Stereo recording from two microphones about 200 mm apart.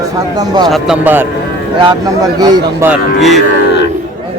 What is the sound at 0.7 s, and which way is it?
Speech, 5° right (ahead or behind).